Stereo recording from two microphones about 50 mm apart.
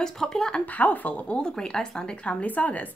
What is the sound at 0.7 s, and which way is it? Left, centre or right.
Speech, left.